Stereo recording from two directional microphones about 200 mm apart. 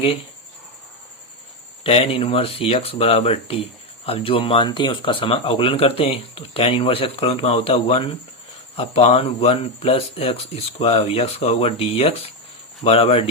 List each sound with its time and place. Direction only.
1.8 s speech: 30° left (ahead or behind)